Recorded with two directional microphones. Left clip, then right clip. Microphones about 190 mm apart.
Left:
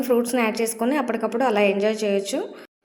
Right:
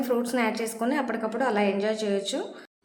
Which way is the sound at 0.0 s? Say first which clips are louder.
Left 5 dB; 20° left (ahead or behind).